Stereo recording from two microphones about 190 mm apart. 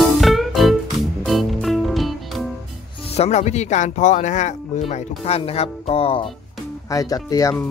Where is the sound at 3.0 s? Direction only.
35° left (ahead or behind).